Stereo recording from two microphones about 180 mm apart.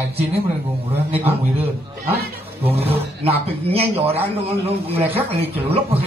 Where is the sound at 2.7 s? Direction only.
35° right (ahead or behind).